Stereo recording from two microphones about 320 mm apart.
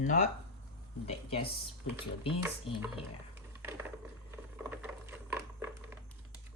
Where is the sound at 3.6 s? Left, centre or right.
Centre.